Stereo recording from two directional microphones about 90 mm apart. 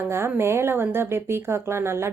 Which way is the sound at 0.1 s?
30° right (ahead or behind).